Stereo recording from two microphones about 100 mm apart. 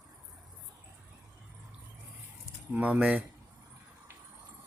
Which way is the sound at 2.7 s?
15° right (ahead or behind).